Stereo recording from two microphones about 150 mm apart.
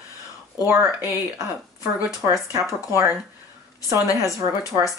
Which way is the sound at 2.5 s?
20° right (ahead or behind).